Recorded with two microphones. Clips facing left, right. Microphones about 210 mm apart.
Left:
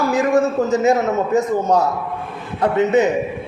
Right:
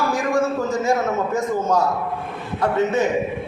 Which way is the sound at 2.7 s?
20° left (ahead or behind).